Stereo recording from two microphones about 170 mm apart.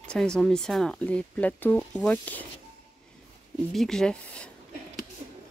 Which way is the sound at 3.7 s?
Centre (ahead or behind).